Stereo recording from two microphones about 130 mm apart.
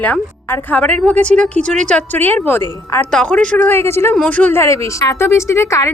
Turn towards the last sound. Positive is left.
turn(degrees=25)  # may be behind; listen again after turning